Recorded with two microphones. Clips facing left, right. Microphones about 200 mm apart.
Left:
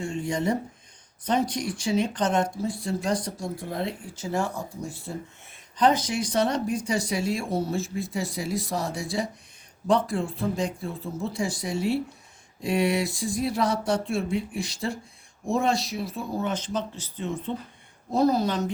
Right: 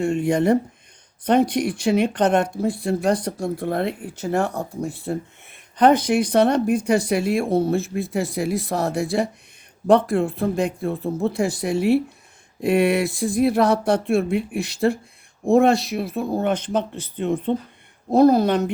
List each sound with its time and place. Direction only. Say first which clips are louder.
0.0 s speech: right 8 dB; 65° right (ahead or behind)